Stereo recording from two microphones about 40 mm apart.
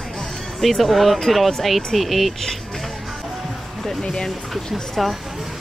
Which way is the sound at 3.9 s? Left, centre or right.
Centre.